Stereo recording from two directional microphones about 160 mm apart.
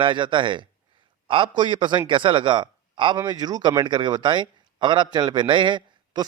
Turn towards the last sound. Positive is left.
turn(degrees=-30)  # may be behind; listen again after turning